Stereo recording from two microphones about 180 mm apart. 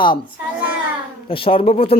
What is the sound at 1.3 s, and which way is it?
Speech, 30° left (ahead or behind).